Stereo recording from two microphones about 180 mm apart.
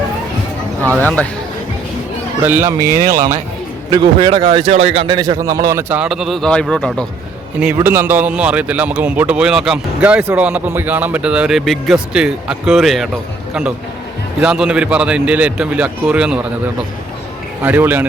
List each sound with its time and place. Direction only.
0.9 s speech: 10° left (ahead or behind)
2.4 s speech: 10° right (ahead or behind)
2.9 s speech: 50° right (ahead or behind)
3.8 s a man's voice: 25° right (ahead or behind); by 7.1 s 5° left (ahead or behind)
7.8 s a man's voice: 10° right (ahead or behind)
17.6 s speech: 10° right (ahead or behind)